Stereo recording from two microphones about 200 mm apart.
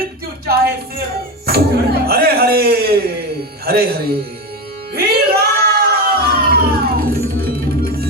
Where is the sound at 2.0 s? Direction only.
50° right (ahead or behind).